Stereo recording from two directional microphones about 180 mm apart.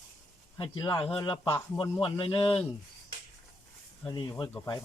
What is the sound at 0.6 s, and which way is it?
Speech, 25° left (ahead or behind).